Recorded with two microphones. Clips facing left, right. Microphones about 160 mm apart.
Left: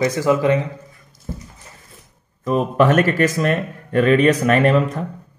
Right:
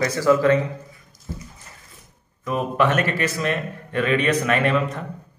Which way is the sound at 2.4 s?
35° left (ahead or behind).